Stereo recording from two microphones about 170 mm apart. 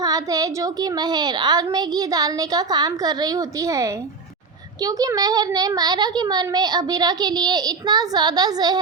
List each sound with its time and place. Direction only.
0.0 s a child's voice: 20° right (ahead or behind)